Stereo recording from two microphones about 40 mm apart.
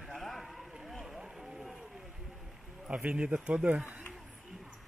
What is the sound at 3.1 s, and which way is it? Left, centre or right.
Speech, right.